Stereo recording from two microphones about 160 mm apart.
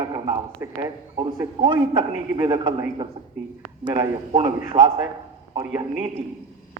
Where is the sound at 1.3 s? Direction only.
25° right (ahead or behind).